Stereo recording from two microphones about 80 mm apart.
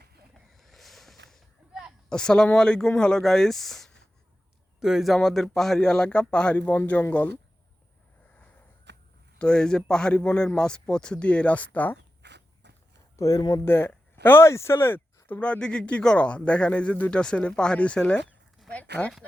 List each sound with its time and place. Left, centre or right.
0.3 s a sound: centre
2.0 s speech: centre
4.8 s speech: centre
9.4 s speech: centre
13.1 s speech: left
13.7 s speech: left